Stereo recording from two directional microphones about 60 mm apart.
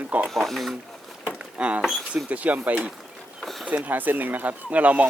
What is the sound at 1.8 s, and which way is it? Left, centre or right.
Speech, centre.